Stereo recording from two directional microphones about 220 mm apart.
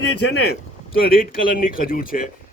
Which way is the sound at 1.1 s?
40° left (ahead or behind).